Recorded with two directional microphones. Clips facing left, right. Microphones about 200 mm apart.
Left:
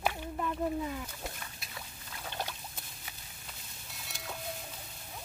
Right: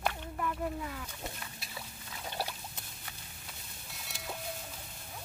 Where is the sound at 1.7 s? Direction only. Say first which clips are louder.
Right 1 dB; 10° right (ahead or behind).